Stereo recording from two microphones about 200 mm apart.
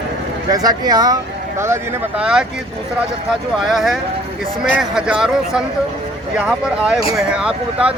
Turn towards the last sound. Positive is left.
turn(degrees=-5)  # may be behind; listen again after turning